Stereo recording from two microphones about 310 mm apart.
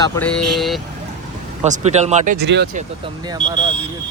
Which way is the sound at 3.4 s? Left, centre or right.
Centre.